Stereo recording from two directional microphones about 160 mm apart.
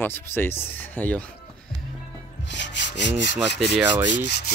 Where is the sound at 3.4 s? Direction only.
5° right (ahead or behind).